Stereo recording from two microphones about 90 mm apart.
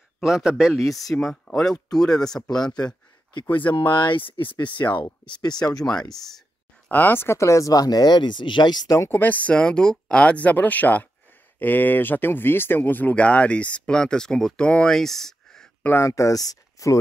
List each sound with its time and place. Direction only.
0.2 s speech: 5° right (ahead or behind)
3.4 s speech: 20° left (ahead or behind)
3.7 s speech: 60° left (ahead or behind)
4.8 s speech: 40° left (ahead or behind)
5.8 s speech: 5° left (ahead or behind)
6.9 s speech: 20° left (ahead or behind); by 8.9 s 50° left (ahead or behind)
8.9 s speech: 35° left (ahead or behind)
9.2 s speech: 20° left (ahead or behind)
16.0 s speech: 35° left (ahead or behind)